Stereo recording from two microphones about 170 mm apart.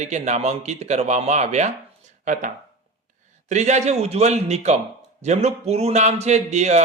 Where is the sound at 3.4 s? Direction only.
45° right (ahead or behind).